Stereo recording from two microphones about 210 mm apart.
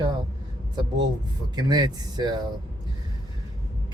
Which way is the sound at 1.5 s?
20° right (ahead or behind).